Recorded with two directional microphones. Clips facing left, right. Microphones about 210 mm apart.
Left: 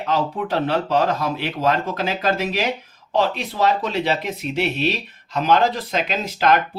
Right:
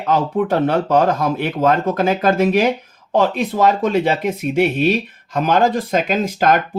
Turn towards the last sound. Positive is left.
turn(degrees=-50)  # may be behind; listen again after turning